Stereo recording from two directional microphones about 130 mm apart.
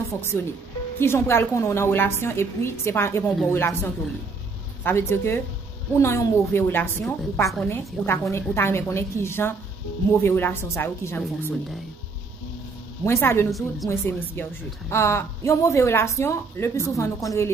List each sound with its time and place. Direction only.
0.1 s a woman's voice: 20° left (ahead or behind)
13.0 s speech: 20° left (ahead or behind)
13.5 s a woman's voice: centre (ahead or behind)
14.0 s speech: 15° left (ahead or behind)